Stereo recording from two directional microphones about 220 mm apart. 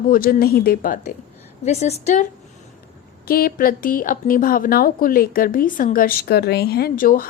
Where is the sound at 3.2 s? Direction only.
40° left (ahead or behind).